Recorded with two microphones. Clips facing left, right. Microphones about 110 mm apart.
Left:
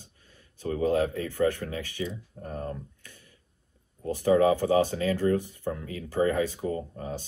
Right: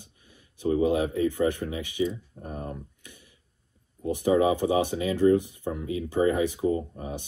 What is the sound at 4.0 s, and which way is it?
Speech, 20° right (ahead or behind).